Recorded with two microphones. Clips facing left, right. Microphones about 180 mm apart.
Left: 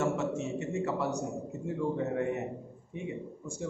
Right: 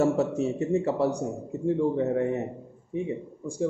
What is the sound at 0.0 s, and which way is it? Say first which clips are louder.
A man's voice: right 7 dB; 35° right (ahead or behind).